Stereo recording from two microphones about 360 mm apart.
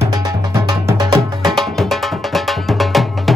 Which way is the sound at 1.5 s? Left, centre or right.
Centre.